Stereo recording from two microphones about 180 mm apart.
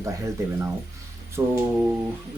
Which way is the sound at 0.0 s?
15° right (ahead or behind).